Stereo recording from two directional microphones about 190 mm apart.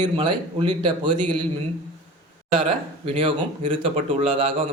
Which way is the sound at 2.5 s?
30° right (ahead or behind).